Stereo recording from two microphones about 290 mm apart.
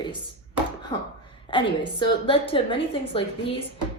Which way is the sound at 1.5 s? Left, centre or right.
Centre.